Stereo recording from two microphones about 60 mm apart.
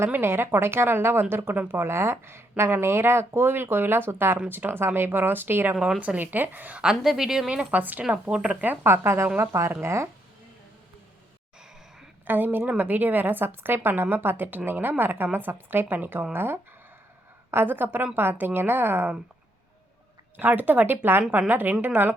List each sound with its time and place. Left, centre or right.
0.1 s a woman's voice: right
6.8 s a woman's voice: centre; by 8.0 s right
8.1 s a woman's voice: centre
8.6 s a woman's voice: right
12.2 s a woman's voice: right
20.3 s a woman's voice: right